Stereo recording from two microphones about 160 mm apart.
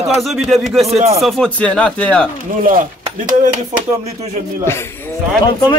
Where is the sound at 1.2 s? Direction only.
5° left (ahead or behind).